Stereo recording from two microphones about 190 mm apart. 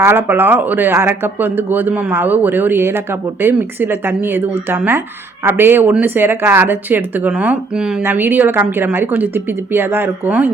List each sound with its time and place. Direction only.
0.0 s speech: 10° right (ahead or behind)